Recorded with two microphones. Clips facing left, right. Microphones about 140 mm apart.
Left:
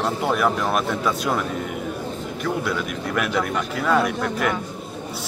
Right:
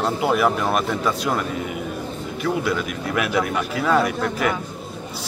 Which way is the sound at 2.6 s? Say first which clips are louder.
Right 2 dB; 5° right (ahead or behind).